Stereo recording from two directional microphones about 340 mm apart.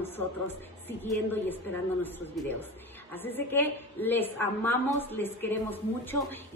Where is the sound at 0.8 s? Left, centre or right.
Centre.